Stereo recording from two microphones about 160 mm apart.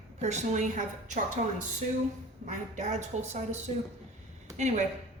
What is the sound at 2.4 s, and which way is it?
A woman's voice, 45° right (ahead or behind).